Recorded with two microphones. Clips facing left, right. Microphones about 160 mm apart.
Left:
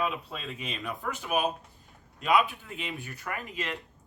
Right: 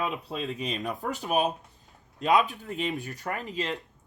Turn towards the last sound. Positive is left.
turn(degrees=-30)  # may be behind; listen again after turning